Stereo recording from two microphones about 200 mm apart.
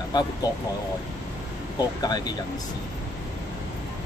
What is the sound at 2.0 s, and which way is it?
Speech, 20° left (ahead or behind).